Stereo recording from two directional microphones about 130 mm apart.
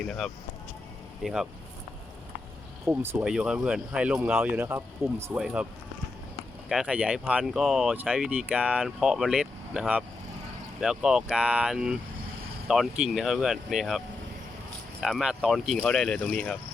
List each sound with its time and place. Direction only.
0.0 s speech: 5° left (ahead or behind)
1.2 s speech: 5° right (ahead or behind)
2.8 s speech: 20° right (ahead or behind)
3.2 s speech: 5° right (ahead or behind)
5.4 s speech: 10° right (ahead or behind)
6.7 s speech: 5° right (ahead or behind)
15.0 s speech: 5° right (ahead or behind)